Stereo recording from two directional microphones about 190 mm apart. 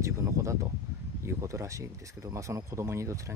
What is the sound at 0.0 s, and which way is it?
Speech, 15° right (ahead or behind).